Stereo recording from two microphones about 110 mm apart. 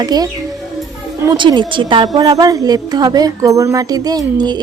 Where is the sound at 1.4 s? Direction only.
45° right (ahead or behind).